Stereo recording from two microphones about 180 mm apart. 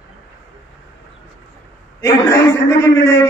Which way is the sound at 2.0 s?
20° left (ahead or behind).